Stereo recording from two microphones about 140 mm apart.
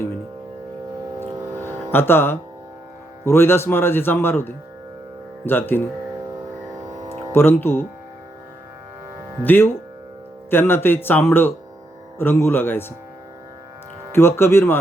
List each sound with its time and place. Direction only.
1.2 s vehicle: 20° right (ahead or behind)
1.6 s music: 15° left (ahead or behind)
3.2 s speech: 15° left (ahead or behind)
6.2 s music: 25° right (ahead or behind)
7.3 s speech: 15° left (ahead or behind)
9.4 s speech: 15° left (ahead or behind)
14.1 s speech: 15° left (ahead or behind)